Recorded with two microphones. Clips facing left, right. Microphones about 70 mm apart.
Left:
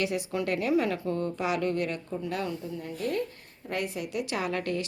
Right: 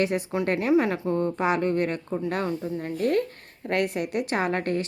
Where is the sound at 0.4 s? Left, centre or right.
Right.